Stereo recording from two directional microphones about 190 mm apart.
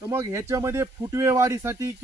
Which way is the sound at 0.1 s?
15° right (ahead or behind).